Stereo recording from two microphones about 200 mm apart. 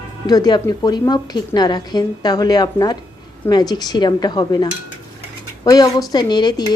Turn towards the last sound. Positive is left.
turn(degrees=20)  # may be behind; listen again after turning